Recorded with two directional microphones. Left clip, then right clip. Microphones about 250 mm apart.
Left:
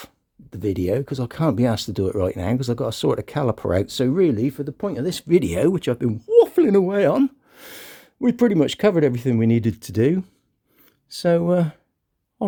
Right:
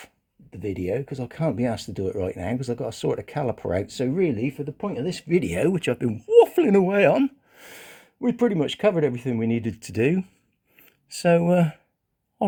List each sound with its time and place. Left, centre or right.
0.5 s speech: left